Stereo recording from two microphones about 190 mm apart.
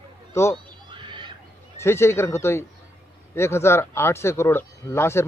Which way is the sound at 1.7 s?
15° left (ahead or behind).